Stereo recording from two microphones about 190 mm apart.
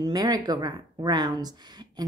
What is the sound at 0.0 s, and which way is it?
A woman's voice, 20° right (ahead or behind).